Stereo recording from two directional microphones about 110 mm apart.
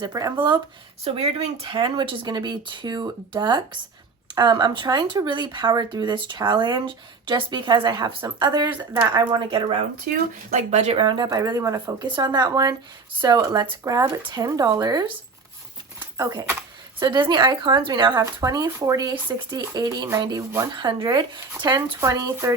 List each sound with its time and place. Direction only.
0.1 s speech: 30° right (ahead or behind)
0.3 s speech: 45° right (ahead or behind)
1.0 s speech: 65° right (ahead or behind)
1.7 s speech: 50° right (ahead or behind)
10.5 s speech: 90° right
10.9 s speech: 45° right (ahead or behind)
16.1 s speech: 30° right (ahead or behind)
17.0 s speech: 45° right (ahead or behind)
20.7 s speech: 45° right (ahead or behind)
21.8 s speech: 30° right (ahead or behind)